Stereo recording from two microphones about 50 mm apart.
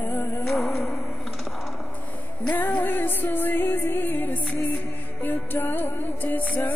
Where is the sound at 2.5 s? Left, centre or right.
Left.